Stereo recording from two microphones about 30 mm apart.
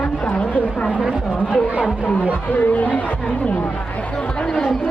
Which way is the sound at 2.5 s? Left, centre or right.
Left.